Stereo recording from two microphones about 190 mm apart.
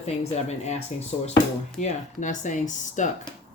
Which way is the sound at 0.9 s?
35° left (ahead or behind).